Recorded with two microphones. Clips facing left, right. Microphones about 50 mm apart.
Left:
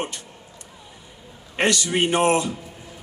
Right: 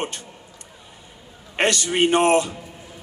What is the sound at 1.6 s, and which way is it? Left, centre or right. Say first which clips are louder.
Speech: right 1 dB; right.